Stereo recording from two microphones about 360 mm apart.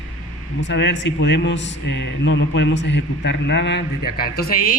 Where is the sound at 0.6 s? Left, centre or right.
Left.